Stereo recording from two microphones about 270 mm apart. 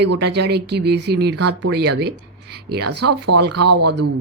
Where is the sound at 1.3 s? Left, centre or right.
Right.